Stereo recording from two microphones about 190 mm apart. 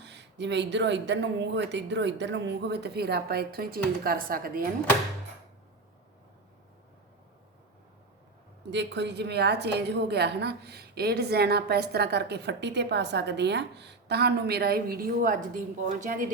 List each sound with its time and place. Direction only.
0.0 s a woman's voice: 65° right (ahead or behind); by 4.6 s 50° right (ahead or behind)
8.7 s a woman's voice: 65° right (ahead or behind); by 16.2 s 45° right (ahead or behind)